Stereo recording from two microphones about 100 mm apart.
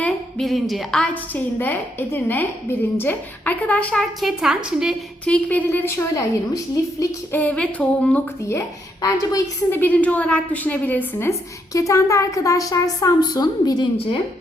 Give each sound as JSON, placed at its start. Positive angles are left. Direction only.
{"t": 0.0, "sound": "a woman's voice", "side_deg": 5}
{"t": 4.2, "sound": "a woman's voice", "side_deg": -5}
{"t": 5.2, "sound": "a woman's voice", "side_deg": 15}
{"t": 7.3, "sound": "a woman's voice", "side_deg": 15}
{"t": 9.0, "sound": "a woman's voice", "side_deg": 35}
{"t": 9.8, "sound": "a woman's voice", "side_deg": 15}